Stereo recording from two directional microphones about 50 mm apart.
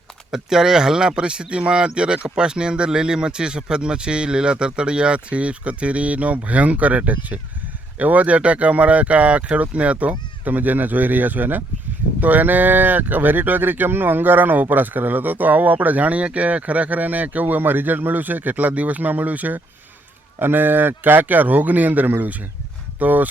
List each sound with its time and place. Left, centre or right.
0.3 s speech: centre; by 23.3 s right